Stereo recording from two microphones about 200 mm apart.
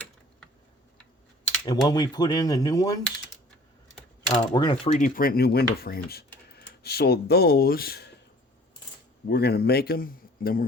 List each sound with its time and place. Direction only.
1.6 s speech: 20° left (ahead or behind)
4.3 s speech: 25° left (ahead or behind)
4.9 s speech: 40° left (ahead or behind)
9.3 s speech: 50° left (ahead or behind)